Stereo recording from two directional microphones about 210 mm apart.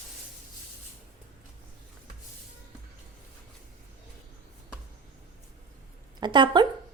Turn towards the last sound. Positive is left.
turn(degrees=-20)  # may be behind; listen again after turning